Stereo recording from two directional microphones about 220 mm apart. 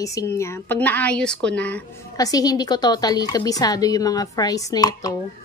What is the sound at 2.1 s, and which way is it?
Speech, 15° left (ahead or behind).